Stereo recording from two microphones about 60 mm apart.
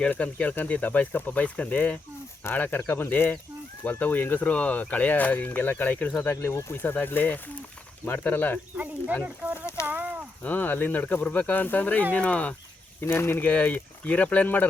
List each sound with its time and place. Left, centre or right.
0.1 s speech: left
2.6 s speech: left
6.3 s speech: left
6.7 s speech: left
9.2 s a sound: right
10.4 s speech: left
13.0 s speech: left
13.5 s speech: left